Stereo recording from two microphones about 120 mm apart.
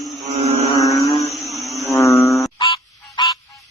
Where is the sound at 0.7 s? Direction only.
30° left (ahead or behind).